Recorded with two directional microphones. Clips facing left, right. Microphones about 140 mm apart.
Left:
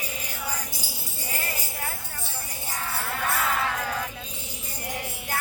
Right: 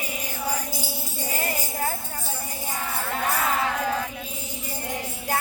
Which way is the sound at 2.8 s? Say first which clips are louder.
Right 2 dB; 20° right (ahead or behind).